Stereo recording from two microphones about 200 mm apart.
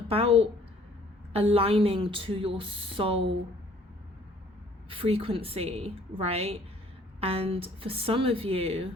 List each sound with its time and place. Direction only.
0.1 s a woman's voice: 30° right (ahead or behind)
4.9 s a woman's voice: 30° right (ahead or behind)